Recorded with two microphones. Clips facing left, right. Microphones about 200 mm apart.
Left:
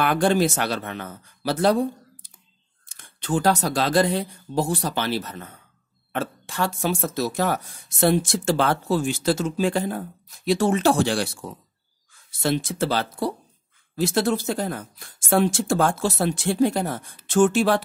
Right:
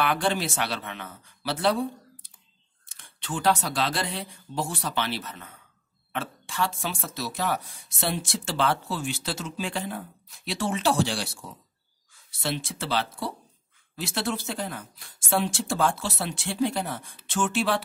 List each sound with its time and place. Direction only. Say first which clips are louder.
0.0 s speech: left 6 dB; 45° left (ahead or behind)